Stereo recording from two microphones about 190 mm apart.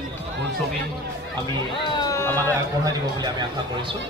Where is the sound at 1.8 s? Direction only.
15° left (ahead or behind).